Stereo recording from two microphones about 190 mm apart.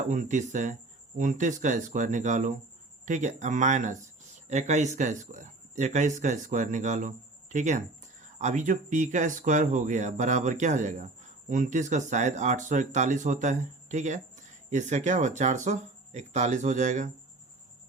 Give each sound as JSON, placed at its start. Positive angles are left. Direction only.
{"t": 0.0, "sound": "speech", "side_deg": -40}